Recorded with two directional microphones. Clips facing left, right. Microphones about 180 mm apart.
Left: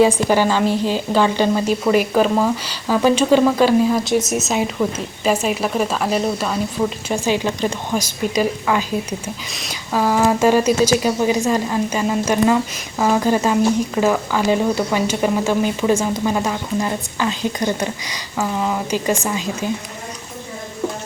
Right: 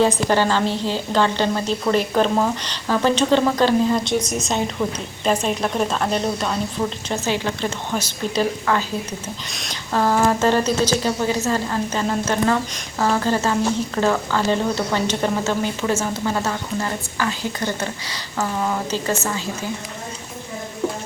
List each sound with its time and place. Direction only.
0.0 s speech: 10° left (ahead or behind)
4.2 s speech: 25° left (ahead or behind)
4.4 s a woman's voice: 5° left (ahead or behind)